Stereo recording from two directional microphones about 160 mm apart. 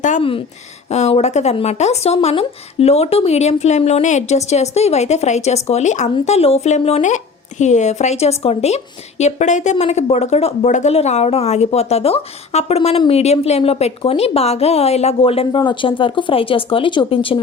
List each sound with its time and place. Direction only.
0.2 s a woman's voice: 35° left (ahead or behind)